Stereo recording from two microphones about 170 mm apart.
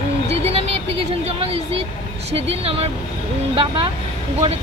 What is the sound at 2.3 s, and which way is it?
Speech, 35° right (ahead or behind).